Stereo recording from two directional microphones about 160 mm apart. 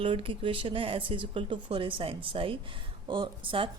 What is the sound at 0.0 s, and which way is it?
Speech, 35° right (ahead or behind).